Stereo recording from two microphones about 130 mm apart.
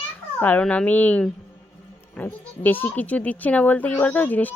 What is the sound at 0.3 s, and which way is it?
Speech, 15° left (ahead or behind).